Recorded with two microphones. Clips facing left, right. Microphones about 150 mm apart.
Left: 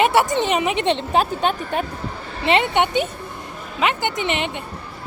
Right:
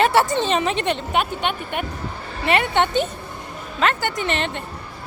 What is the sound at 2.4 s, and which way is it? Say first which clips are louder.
A woman's voice: left 1 dB; 20° left (ahead or behind).